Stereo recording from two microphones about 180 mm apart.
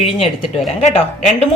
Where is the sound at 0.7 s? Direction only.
35° left (ahead or behind).